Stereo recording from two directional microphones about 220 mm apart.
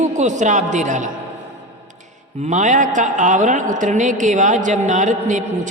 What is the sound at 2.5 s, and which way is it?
A woman's voice, 35° right (ahead or behind).